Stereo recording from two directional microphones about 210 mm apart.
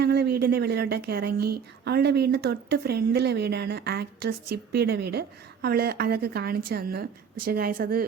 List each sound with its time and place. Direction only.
0.0 s a woman's voice: 50° right (ahead or behind)